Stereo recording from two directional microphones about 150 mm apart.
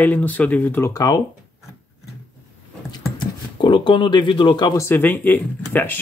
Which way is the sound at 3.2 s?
30° left (ahead or behind).